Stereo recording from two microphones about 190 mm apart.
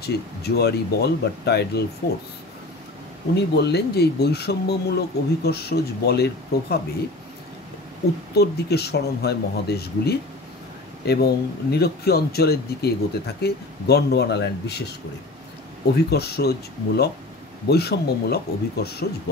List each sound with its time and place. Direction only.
0.0 s speech: 60° left (ahead or behind)
3.3 s speech: 60° left (ahead or behind)
8.4 s speech: 60° left (ahead or behind)
16.1 s speech: 55° left (ahead or behind)